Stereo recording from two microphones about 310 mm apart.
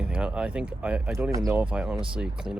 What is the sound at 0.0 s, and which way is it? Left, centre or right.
Speech, centre.